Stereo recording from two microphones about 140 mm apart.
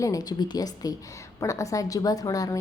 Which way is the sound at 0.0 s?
25° left (ahead or behind).